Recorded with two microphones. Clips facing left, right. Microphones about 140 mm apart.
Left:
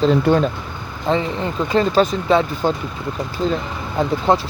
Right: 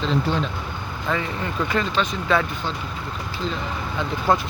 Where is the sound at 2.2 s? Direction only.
25° left (ahead or behind).